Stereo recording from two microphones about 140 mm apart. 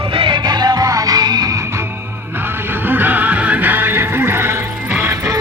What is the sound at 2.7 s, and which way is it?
Music, 15° right (ahead or behind).